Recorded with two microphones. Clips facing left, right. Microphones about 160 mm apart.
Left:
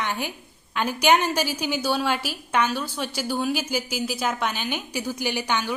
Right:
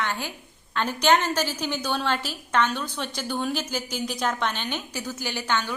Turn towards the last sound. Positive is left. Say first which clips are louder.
# left 2 dB
turn(degrees=15)  # may be behind; listen again after turning